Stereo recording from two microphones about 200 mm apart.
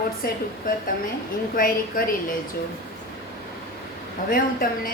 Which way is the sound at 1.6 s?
45° left (ahead or behind).